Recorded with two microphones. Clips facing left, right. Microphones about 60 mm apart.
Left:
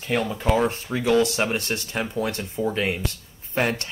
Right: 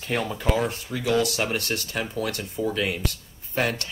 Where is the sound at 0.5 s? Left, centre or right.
Left.